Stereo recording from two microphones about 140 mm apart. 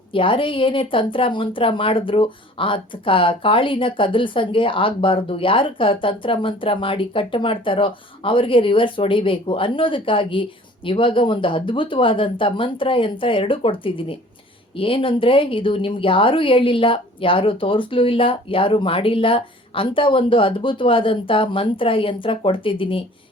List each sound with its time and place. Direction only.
0.1 s a woman's voice: 40° left (ahead or behind)